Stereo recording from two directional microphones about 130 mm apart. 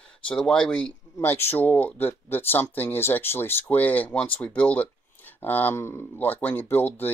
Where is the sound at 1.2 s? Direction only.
20° left (ahead or behind).